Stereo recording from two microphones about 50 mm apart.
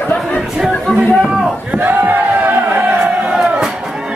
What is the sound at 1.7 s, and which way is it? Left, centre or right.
Crowd, right.